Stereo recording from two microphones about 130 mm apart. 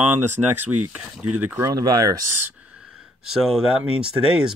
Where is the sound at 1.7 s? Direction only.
30° right (ahead or behind).